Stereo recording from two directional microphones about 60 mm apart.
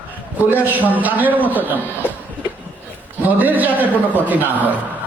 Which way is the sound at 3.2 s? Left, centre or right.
Right.